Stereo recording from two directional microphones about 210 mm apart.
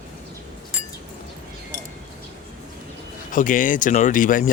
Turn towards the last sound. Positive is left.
turn(degrees=40)  # may be behind; listen again after turning